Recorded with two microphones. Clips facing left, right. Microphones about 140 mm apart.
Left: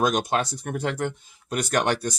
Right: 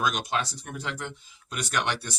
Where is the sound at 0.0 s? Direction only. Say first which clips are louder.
Left 5 dB; 45° left (ahead or behind).